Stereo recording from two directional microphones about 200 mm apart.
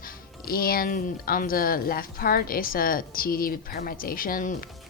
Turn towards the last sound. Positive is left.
turn(degrees=45)  # may be behind; listen again after turning